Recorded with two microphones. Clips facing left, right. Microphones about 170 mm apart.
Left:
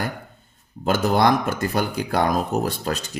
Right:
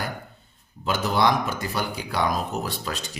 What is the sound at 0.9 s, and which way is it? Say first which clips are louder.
Speech: left 4 dB; 50° left (ahead or behind).